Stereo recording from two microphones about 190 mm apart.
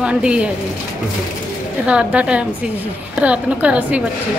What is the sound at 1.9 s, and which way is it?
A woman's voice, 5° right (ahead or behind).